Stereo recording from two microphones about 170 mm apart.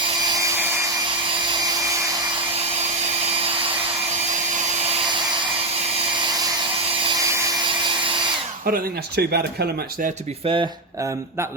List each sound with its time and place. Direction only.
8.6 s speech: 65° right (ahead or behind)
10.4 s speech: 30° right (ahead or behind)